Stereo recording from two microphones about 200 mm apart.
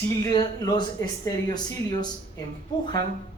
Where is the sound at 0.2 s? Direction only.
20° left (ahead or behind).